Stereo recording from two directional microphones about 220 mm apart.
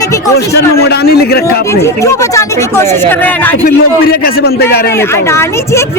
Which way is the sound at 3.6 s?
45° left (ahead or behind).